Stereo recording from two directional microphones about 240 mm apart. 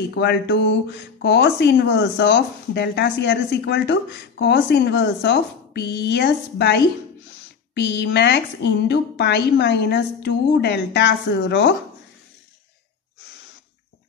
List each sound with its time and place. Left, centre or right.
0.2 s speech: left